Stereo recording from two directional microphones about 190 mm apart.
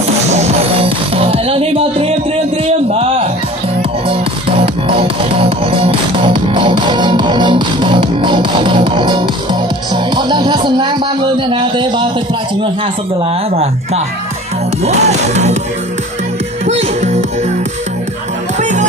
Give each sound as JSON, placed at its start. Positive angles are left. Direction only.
{"t": 0.3, "sound": "music", "side_deg": -30}
{"t": 13.5, "sound": "music", "side_deg": -30}
{"t": 16.6, "sound": "music", "side_deg": -35}
{"t": 18.6, "sound": "music", "side_deg": -40}